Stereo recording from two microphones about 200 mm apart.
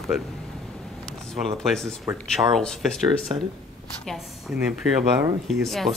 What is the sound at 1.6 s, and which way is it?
Speech, centre (ahead or behind).